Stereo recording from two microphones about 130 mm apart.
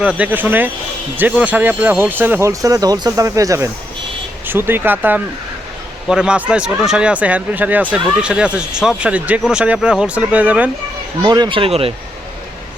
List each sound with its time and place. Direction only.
0.0 s speech: 10° right (ahead or behind)
11.2 s speech: 35° right (ahead or behind)